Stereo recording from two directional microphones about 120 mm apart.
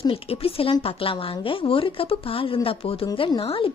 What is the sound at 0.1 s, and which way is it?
A woman's voice, 50° left (ahead or behind).